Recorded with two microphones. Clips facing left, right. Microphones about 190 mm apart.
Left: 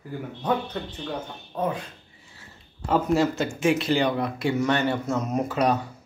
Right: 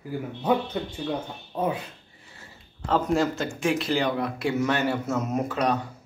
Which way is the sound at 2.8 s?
5° left (ahead or behind).